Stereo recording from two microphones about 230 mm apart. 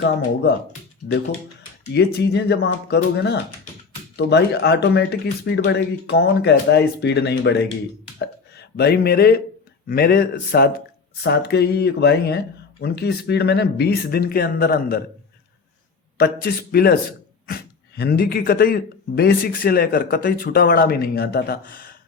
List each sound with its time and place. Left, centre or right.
1.0 s speech: left
16.1 s speech: left